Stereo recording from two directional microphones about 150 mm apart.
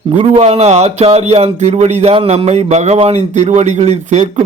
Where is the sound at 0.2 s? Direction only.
40° right (ahead or behind).